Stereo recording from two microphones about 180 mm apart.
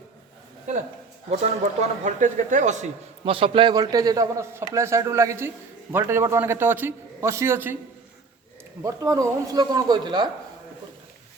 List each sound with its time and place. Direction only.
1.3 s a man's voice: 40° right (ahead or behind); by 7.8 s 10° right (ahead or behind)
8.8 s a man's voice: 20° right (ahead or behind)